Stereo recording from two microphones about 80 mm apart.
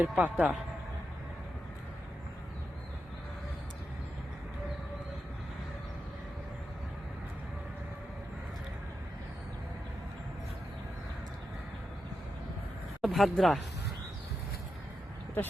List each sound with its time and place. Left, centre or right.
0.0 s a man's voice: centre
13.0 s speech: centre